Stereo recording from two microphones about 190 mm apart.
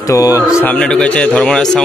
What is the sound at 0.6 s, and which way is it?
A man's voice, 5° left (ahead or behind).